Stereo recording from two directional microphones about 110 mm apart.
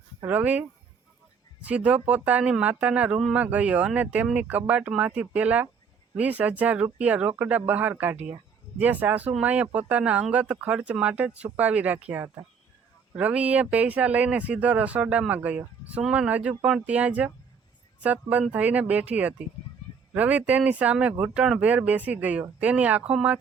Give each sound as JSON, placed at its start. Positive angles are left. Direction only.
{"t": 0.3, "sound": "speech", "side_deg": -15}
{"t": 1.6, "sound": "speech", "side_deg": -10}